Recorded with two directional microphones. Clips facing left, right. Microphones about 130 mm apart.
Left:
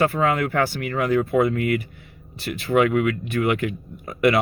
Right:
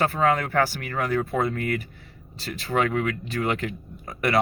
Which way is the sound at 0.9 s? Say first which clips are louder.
Left 4 dB; 20° left (ahead or behind).